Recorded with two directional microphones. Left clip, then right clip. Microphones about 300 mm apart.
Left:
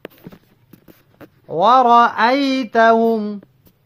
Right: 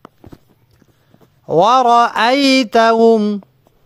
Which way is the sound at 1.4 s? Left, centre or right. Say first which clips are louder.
Right 2 dB; right.